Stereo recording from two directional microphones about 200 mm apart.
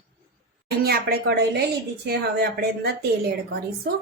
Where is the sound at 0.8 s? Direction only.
50° right (ahead or behind).